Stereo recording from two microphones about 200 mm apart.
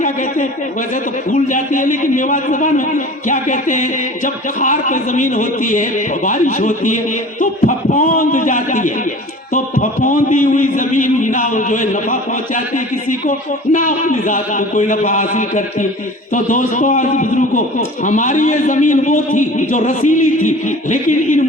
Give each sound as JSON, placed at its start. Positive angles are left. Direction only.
{"t": 0.0, "sound": "a man's voice", "side_deg": 40}